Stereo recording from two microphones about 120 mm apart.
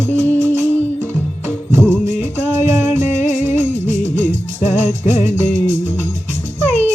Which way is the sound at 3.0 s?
80° left.